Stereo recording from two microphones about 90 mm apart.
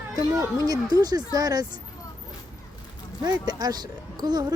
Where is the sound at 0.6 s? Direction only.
45° right (ahead or behind).